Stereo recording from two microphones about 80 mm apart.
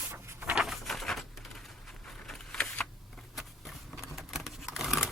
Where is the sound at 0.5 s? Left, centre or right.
Centre.